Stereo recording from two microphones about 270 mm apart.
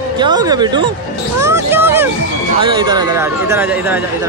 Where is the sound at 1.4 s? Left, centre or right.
Centre.